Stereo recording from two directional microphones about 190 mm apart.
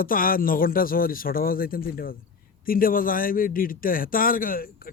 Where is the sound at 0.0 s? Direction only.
50° left (ahead or behind).